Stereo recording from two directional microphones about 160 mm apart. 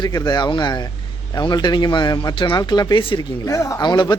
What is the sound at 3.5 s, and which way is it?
Speech, 20° left (ahead or behind).